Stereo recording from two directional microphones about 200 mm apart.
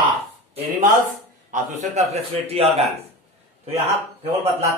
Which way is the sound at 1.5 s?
35° right (ahead or behind).